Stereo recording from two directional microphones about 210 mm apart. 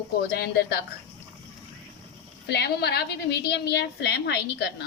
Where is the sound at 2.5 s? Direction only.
50° left (ahead or behind).